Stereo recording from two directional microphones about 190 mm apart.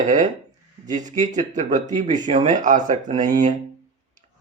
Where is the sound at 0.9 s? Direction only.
40° right (ahead or behind).